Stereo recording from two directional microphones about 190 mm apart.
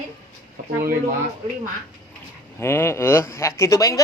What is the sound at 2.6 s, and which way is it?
Speech, 15° left (ahead or behind).